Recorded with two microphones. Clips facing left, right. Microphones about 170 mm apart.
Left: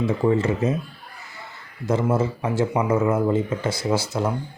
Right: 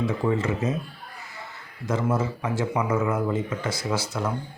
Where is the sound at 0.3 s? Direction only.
30° left (ahead or behind).